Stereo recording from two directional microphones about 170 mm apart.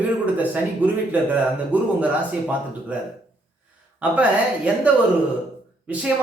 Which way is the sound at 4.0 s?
10° right (ahead or behind).